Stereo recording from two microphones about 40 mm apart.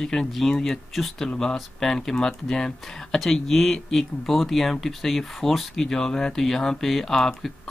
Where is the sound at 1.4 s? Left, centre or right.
Centre.